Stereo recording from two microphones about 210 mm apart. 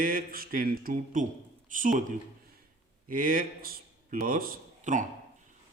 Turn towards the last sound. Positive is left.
turn(degrees=-35)  # may be behind; listen again after turning